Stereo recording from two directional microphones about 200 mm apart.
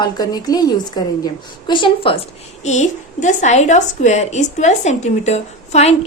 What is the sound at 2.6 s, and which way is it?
A woman's voice, 35° left (ahead or behind).